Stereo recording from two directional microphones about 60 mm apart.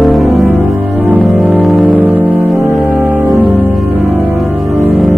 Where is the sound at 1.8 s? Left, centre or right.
Right.